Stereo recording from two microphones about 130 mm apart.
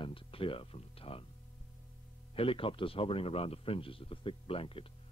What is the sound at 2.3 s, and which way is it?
Speech, 45° left (ahead or behind).